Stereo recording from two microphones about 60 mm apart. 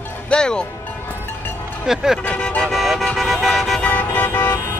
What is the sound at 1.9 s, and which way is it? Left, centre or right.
Speech, centre.